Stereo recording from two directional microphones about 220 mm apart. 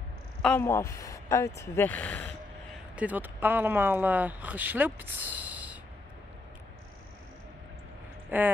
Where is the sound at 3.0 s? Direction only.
5° right (ahead or behind).